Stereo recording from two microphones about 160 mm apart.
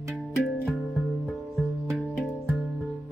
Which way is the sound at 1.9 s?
Centre (ahead or behind).